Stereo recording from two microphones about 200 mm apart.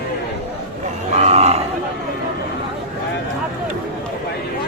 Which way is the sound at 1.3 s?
30° right (ahead or behind).